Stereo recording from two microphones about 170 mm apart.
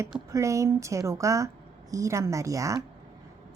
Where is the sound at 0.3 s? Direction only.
20° right (ahead or behind).